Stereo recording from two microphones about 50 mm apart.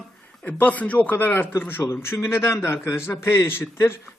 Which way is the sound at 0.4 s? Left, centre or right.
Left.